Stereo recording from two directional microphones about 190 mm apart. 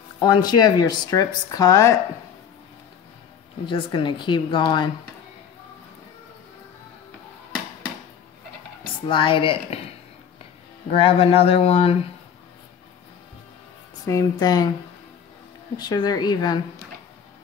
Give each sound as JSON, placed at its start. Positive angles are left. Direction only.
{"t": 0.2, "sound": "speech", "side_deg": 20}
{"t": 3.6, "sound": "speech", "side_deg": 25}
{"t": 9.0, "sound": "speech", "side_deg": 25}
{"t": 14.0, "sound": "speech", "side_deg": 20}
{"t": 15.8, "sound": "speech", "side_deg": 20}